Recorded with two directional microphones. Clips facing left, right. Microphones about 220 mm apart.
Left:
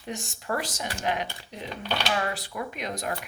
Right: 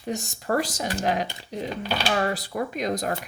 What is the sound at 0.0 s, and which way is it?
Speech, 40° right (ahead or behind).